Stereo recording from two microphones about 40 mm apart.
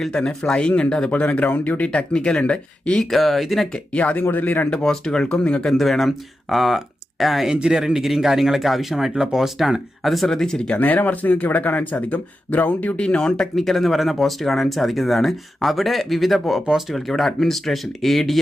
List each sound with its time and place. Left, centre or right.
0.1 s speech: centre
1.1 s speech: left
2.1 s speech: left
3.0 s speech: centre
3.9 s speech: left
4.8 s speech: centre
5.6 s speech: centre
7.4 s speech: centre
10.2 s speech: centre
10.8 s speech: left
13.0 s speech: left
13.6 s speech: centre